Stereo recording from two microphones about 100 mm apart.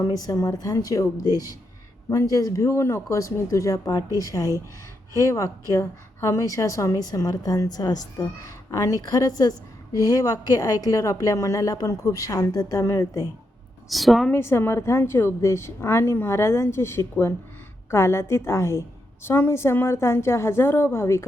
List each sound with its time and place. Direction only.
0.0 s a woman's voice: 35° left (ahead or behind)
13.9 s a woman's voice: centre (ahead or behind)
14.3 s a woman's voice: 25° left (ahead or behind)